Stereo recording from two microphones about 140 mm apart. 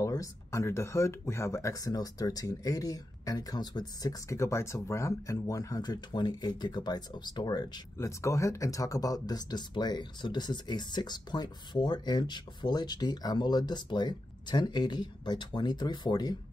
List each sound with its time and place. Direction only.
0.0 s speech: 25° left (ahead or behind)